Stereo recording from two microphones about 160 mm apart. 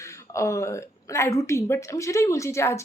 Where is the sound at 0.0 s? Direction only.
20° left (ahead or behind).